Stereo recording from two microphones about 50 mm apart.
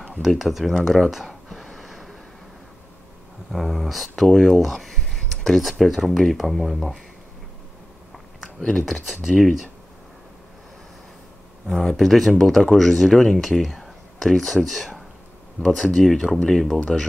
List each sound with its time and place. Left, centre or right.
0.2 s a sound: centre
3.5 s speech: centre
8.7 s speech: centre
11.6 s speech: centre